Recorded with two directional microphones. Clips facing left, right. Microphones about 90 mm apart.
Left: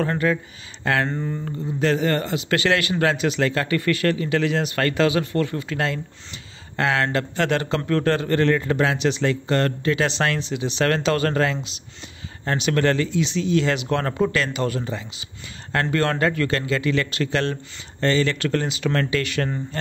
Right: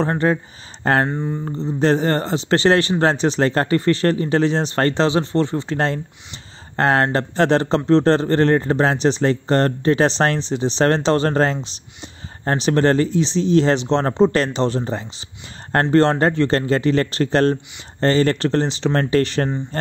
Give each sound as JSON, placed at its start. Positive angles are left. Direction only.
{"t": 0.0, "sound": "speech", "side_deg": -30}
{"t": 1.0, "sound": "speech", "side_deg": -20}
{"t": 14.3, "sound": "speech", "side_deg": -40}
{"t": 14.6, "sound": "speech", "side_deg": -30}
{"t": 19.7, "sound": "a sound", "side_deg": -40}